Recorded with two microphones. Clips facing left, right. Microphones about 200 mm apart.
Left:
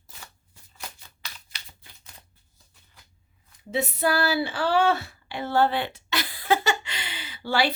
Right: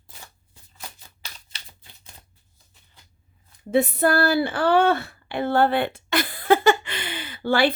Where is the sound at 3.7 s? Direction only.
55° right (ahead or behind).